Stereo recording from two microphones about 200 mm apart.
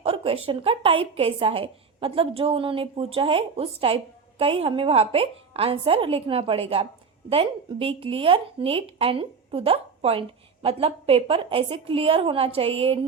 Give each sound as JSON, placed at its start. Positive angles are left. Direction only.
{"t": 0.0, "sound": "a woman's voice", "side_deg": -30}